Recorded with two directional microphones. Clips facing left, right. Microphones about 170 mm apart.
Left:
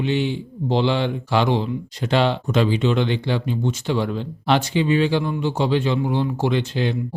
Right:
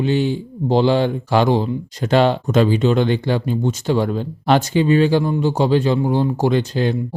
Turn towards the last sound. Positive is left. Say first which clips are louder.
# right 4 dB
turn(degrees=-40)  # may be behind; listen again after turning